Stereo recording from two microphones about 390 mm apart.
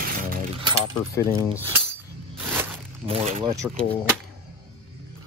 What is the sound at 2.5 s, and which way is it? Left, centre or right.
Zipper, centre.